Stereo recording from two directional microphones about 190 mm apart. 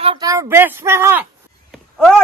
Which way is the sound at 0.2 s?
15° right (ahead or behind).